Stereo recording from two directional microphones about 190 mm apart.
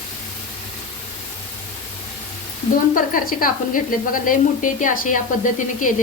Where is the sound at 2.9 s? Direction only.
45° left (ahead or behind).